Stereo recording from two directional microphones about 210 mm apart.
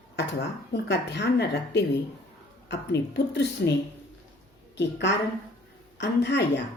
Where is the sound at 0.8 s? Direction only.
55° left (ahead or behind).